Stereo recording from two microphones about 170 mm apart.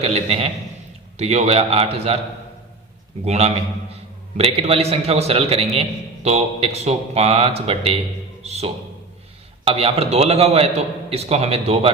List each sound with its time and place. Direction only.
0.0 s a sound: 35° right (ahead or behind)
1.2 s a man's voice: 40° right (ahead or behind)
3.2 s a man's voice: 40° right (ahead or behind)